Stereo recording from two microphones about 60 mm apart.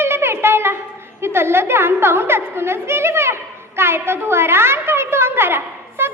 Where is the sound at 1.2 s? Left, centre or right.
Right.